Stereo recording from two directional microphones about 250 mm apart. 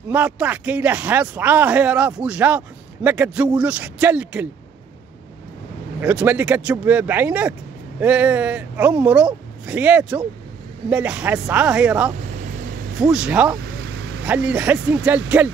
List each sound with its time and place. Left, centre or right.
0.1 s speech: centre
5.9 s speech: centre
12.2 s vehicle: right
12.9 s speech: centre
13.8 s vehicle: right
14.2 s speech: centre